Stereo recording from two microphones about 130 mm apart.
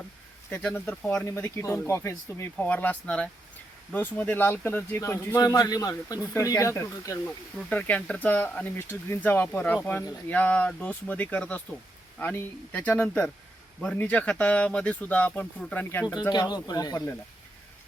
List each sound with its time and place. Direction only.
0.5 s speech: 15° left (ahead or behind)
7.7 s speech: 10° left (ahead or behind)
16.3 s speech: 30° left (ahead or behind)